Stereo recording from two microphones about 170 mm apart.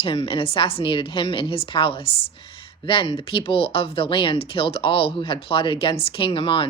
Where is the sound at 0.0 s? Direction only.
30° left (ahead or behind).